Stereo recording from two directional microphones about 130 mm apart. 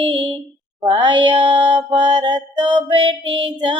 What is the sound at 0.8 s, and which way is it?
Music, 40° right (ahead or behind).